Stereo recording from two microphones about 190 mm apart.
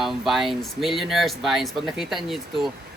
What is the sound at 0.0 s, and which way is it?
Speech, centre (ahead or behind).